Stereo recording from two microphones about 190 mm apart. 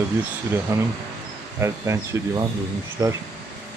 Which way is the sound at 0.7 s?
15° right (ahead or behind).